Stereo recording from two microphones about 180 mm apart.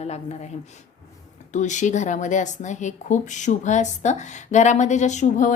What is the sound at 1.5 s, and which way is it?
A woman's voice, 40° left (ahead or behind).